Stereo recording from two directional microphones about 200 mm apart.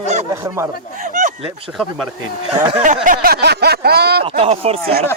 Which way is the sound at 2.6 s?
30° right (ahead or behind).